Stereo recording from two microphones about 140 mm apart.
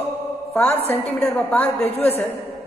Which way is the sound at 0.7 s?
45° left (ahead or behind).